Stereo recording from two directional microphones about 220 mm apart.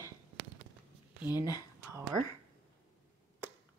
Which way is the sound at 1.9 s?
15° right (ahead or behind).